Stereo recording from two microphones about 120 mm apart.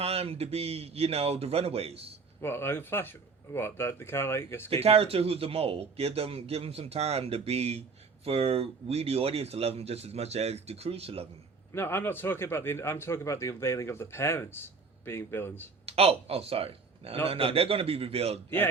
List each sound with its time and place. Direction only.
0.0 s a man's voice: 55° right (ahead or behind)
2.4 s a man's voice: 20° left (ahead or behind)
4.7 s a man's voice: 55° right (ahead or behind)
11.7 s a man's voice: 20° left (ahead or behind)
15.9 s a man's voice: 55° right (ahead or behind)